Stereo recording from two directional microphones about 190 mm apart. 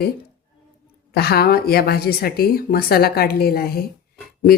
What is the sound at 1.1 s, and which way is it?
Speech, 55° left (ahead or behind).